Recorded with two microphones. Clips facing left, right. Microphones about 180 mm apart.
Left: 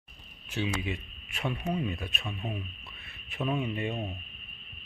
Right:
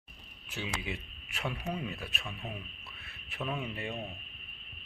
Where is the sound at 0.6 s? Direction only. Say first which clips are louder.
Left 6 dB; 10° right (ahead or behind).